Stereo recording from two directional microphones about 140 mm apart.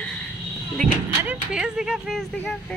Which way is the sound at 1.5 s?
5° right (ahead or behind).